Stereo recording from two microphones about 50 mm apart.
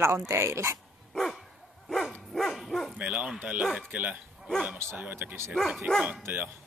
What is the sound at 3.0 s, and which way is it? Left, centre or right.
Speech, right.